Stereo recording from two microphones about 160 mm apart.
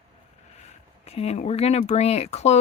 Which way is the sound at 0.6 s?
40° left (ahead or behind).